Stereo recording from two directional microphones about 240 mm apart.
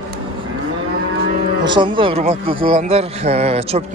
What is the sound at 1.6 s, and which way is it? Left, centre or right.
A man's voice, centre.